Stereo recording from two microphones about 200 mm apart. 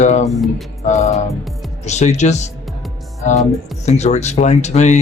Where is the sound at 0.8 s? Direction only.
35° left (ahead or behind).